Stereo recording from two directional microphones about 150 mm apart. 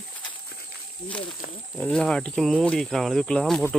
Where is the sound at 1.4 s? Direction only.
65° left (ahead or behind).